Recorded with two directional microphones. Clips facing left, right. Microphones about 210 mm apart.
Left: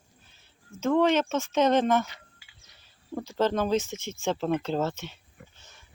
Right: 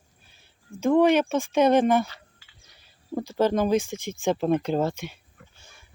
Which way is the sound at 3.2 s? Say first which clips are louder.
Right 3 dB; 10° right (ahead or behind).